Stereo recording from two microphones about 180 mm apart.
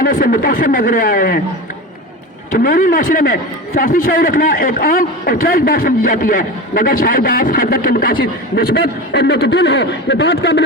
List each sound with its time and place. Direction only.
0.0 s a man's voice: 50° left (ahead or behind)
2.5 s a man's voice: 50° left (ahead or behind); by 10.6 s 75° left (ahead or behind)